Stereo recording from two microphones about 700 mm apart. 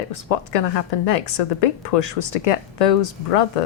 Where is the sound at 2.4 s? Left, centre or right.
Left.